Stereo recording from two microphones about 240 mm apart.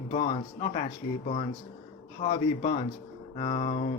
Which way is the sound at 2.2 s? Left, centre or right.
Left.